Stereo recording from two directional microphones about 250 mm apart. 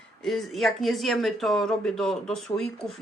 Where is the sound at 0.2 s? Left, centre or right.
Centre.